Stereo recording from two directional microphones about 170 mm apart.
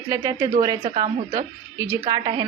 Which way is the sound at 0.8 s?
35° right (ahead or behind).